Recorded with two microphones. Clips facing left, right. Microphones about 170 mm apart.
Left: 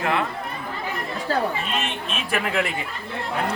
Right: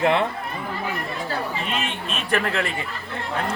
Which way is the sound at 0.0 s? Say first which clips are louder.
Right 4 dB; 25° right (ahead or behind).